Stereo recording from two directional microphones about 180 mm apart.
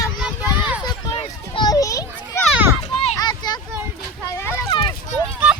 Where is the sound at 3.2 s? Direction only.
25° left (ahead or behind).